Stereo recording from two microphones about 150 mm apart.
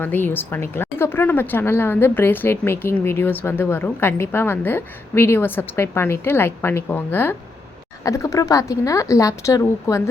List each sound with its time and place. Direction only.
0.0 s a woman's voice: 15° left (ahead or behind)